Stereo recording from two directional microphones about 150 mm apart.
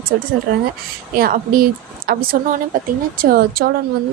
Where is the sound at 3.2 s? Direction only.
80° right.